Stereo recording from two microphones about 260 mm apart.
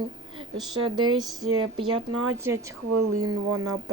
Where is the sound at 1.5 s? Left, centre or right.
Right.